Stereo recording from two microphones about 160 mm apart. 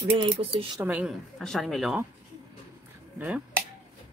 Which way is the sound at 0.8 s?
10° right (ahead or behind).